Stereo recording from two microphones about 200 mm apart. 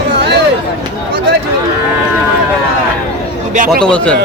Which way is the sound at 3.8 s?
5° left (ahead or behind).